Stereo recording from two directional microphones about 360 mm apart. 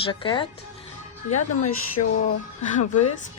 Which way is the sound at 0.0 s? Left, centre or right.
Centre.